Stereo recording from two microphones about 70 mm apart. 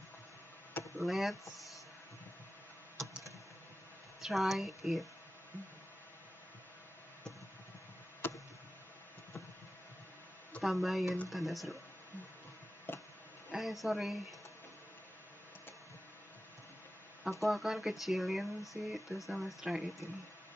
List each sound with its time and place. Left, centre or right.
0.9 s speech: centre
4.2 s speech: centre
8.2 s a sound: left
10.6 s speech: centre
12.9 s a sound: left
13.5 s a woman's voice: centre
17.2 s speech: centre